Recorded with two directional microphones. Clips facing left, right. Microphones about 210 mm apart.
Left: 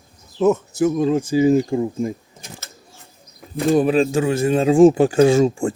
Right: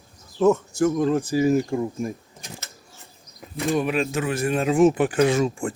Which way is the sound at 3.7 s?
30° left (ahead or behind).